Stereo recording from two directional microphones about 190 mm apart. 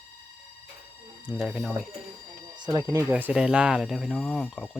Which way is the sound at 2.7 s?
20° right (ahead or behind).